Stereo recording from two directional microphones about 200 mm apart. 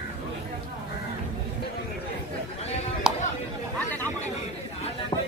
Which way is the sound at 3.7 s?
10° left (ahead or behind).